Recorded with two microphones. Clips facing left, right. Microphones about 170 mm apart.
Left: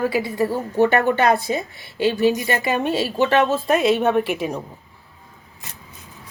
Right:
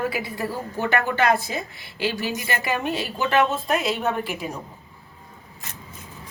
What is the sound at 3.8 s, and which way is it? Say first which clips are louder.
Speech: left 7 dB; 65° left (ahead or behind).